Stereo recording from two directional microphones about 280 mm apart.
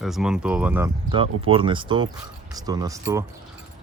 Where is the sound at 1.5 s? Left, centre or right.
Centre.